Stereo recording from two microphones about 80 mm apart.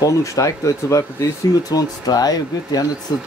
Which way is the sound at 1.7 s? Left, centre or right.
Left.